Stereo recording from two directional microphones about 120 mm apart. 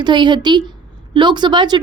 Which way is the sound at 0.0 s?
40° right (ahead or behind).